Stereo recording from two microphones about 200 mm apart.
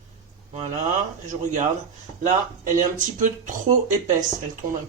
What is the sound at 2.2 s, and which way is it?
Speech, 40° right (ahead or behind).